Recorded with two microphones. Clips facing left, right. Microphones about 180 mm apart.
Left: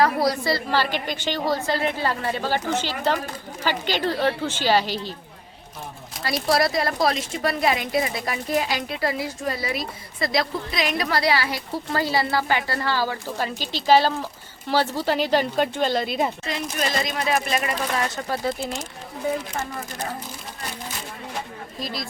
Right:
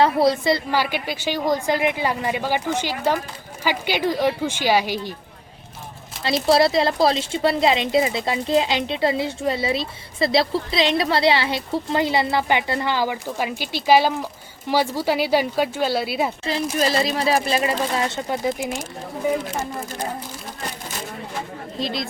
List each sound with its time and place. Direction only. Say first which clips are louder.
0.0 s a woman's voice: right 3 dB; 25° right (ahead or behind)
6.2 s a woman's voice: right 4 dB; 25° right (ahead or behind); by 16.3 s 5° right (ahead or behind)
16.4 s speech: right 5 dB; 30° right (ahead or behind)
21.8 s speech: right 5 dB; 25° right (ahead or behind)